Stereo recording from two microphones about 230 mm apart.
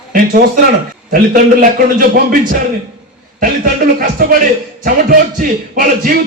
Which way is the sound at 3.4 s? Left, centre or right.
Right.